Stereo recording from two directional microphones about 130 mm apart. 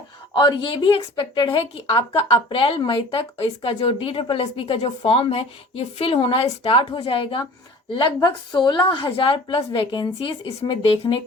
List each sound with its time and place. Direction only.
0.3 s a woman's voice: 35° left (ahead or behind)